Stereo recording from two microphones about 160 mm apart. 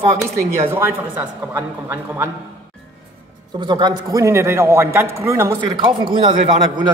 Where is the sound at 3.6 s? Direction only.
30° right (ahead or behind).